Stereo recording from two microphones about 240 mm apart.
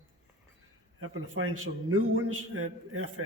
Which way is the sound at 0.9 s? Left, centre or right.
Right.